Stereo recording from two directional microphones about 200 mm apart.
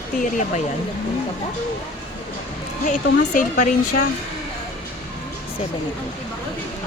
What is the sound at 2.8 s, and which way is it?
Speech, 40° left (ahead or behind).